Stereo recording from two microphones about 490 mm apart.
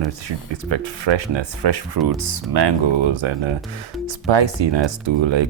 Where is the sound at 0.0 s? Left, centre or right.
Right.